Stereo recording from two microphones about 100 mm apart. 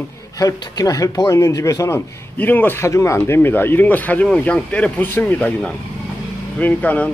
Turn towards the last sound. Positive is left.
turn(degrees=15)  # may be behind; listen again after turning